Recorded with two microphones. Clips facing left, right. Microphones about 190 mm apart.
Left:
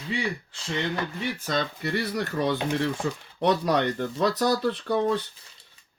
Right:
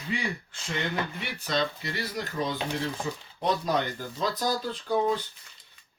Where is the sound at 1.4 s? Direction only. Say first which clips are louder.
Right 1 dB; 55° left (ahead or behind).